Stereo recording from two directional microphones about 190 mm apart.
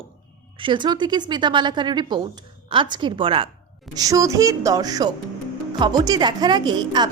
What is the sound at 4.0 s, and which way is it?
A woman's voice, 15° right (ahead or behind).